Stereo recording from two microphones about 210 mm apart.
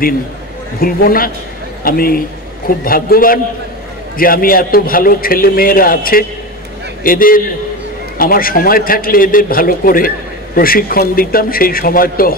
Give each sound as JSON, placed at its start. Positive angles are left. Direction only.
{"t": 0.7, "sound": "a man's voice", "side_deg": 45}